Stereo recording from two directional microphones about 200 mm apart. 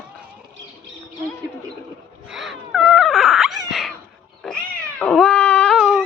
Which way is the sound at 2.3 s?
Centre (ahead or behind).